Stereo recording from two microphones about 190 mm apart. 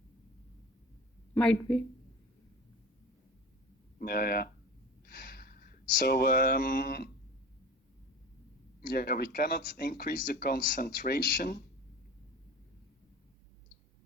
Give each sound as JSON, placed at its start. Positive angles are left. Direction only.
{"t": 1.4, "sound": "speech", "side_deg": 5}
{"t": 3.9, "sound": "speech", "side_deg": 50}
{"t": 5.0, "sound": "a sound", "side_deg": 50}
{"t": 8.9, "sound": "speech", "side_deg": 50}